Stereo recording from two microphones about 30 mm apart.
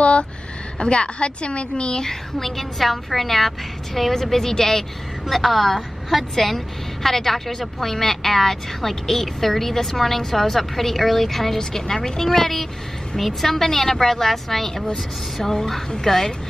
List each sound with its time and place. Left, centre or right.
0.0 s a sound: left
0.7 s a woman's voice: left
2.0 s a woman's voice: centre
5.2 s a woman's voice: centre